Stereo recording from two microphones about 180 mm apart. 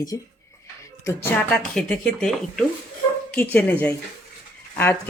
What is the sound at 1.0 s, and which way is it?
Speech, 5° left (ahead or behind).